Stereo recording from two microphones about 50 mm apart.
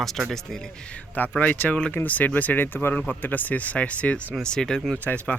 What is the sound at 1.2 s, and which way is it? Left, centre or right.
Speech, left.